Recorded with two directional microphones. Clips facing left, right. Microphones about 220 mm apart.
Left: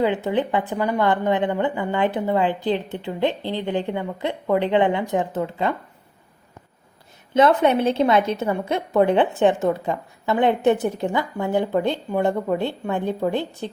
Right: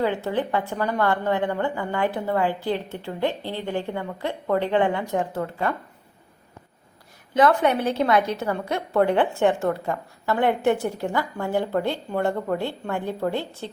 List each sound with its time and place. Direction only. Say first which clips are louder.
0.0 s a woman's voice: left 3 dB; 15° left (ahead or behind)
7.3 s a woman's voice: left 3 dB; 25° left (ahead or behind)